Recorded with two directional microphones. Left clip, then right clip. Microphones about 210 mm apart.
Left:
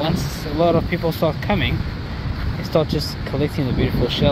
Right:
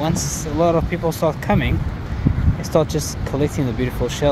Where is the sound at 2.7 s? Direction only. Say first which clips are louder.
Right 1 dB; 15° right (ahead or behind).